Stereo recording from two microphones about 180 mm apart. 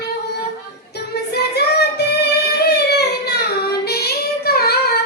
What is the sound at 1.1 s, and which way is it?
Singing, 65° left (ahead or behind).